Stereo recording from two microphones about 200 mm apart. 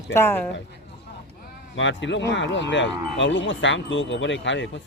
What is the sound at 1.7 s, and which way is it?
Speech, 65° left (ahead or behind).